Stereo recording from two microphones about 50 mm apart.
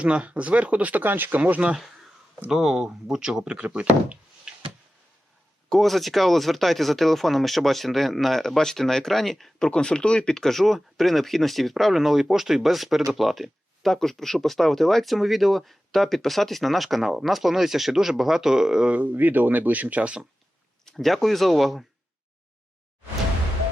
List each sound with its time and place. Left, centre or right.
0.0 s speech: right
2.5 s speech: centre
3.6 s speech: right
5.6 s speech: centre
18.9 s speech: right
20.8 s speech: centre